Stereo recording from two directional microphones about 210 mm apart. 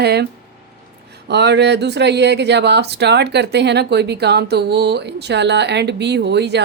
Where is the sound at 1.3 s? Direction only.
55° right (ahead or behind).